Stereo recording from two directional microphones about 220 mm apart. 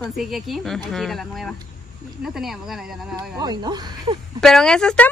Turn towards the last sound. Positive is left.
turn(degrees=5)  # may be behind; listen again after turning